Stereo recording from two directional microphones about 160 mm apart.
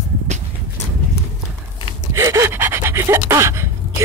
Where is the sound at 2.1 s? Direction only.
20° right (ahead or behind).